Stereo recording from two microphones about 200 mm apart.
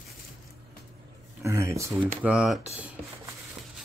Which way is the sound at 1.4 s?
15° right (ahead or behind).